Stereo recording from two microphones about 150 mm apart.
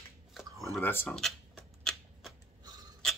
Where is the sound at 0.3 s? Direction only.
Centre (ahead or behind).